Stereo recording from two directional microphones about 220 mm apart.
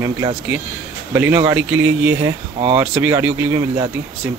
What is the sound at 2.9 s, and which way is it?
Speech, 5° right (ahead or behind).